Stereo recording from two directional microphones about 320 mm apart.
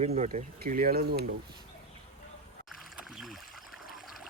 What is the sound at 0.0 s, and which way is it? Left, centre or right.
Speech, right.